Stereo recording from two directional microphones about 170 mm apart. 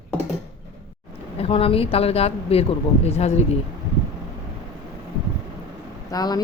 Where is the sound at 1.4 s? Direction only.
35° left (ahead or behind).